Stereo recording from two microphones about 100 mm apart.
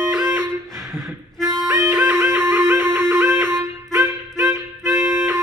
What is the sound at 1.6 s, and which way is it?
Music, 25° right (ahead or behind).